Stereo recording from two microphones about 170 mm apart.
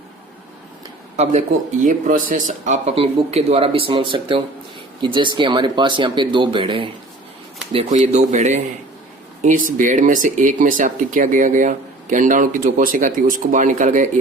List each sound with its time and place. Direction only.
1.1 s speech: 40° right (ahead or behind)